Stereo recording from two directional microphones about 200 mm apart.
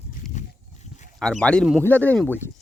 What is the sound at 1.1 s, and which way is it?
Speech, centre (ahead or behind).